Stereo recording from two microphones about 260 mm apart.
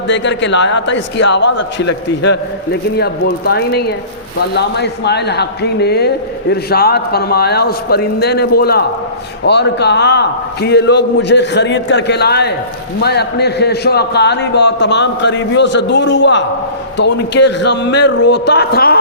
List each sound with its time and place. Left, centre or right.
0.1 s a man's voice: left